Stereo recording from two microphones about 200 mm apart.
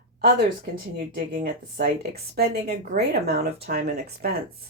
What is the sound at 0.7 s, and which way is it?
Speech, 45° right (ahead or behind).